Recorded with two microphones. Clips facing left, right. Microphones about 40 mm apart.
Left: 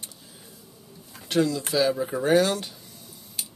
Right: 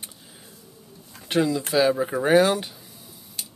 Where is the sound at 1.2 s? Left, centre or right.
Centre.